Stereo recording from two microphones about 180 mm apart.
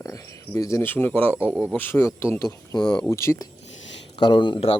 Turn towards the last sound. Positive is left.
turn(degrees=30)  # may be behind; listen again after turning